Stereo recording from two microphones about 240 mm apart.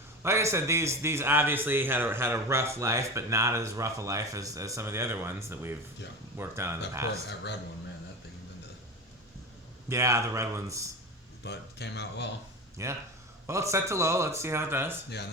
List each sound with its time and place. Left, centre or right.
0.2 s speech: centre
9.9 s speech: centre
11.4 s speech: left
12.7 s speech: centre